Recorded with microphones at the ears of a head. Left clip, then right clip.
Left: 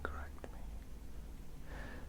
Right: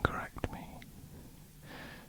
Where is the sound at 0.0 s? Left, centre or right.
Right.